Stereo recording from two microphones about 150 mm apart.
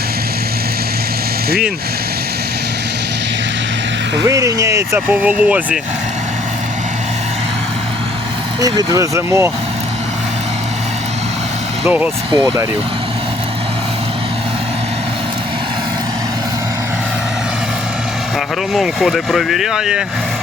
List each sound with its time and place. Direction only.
4.2 s speech: 20° right (ahead or behind)
8.6 s speech: 25° right (ahead or behind)
11.9 s speech: 10° right (ahead or behind)
18.7 s speech: centre (ahead or behind)